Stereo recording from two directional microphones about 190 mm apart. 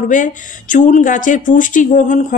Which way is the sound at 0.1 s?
40° left (ahead or behind).